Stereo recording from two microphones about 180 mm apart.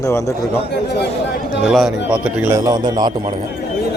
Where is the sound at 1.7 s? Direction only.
Centre (ahead or behind).